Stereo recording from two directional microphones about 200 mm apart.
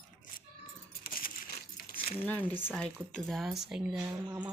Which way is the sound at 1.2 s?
45° left (ahead or behind).